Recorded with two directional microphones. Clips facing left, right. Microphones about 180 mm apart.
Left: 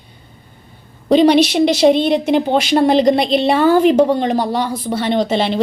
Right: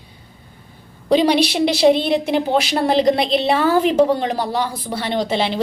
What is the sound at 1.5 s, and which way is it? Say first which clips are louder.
A woman's voice: left 3 dB; 5° right (ahead or behind).